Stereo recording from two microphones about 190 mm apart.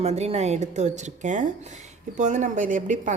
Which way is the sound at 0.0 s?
35° right (ahead or behind).